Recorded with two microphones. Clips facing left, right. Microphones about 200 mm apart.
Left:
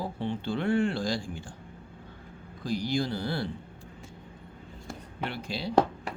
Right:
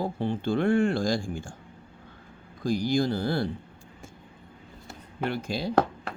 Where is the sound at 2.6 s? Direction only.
45° right (ahead or behind).